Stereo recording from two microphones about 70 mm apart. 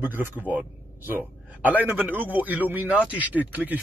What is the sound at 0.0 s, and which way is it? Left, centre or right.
A man's voice, right.